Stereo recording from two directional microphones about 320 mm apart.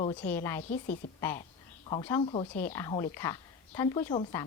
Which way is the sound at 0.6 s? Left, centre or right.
Left.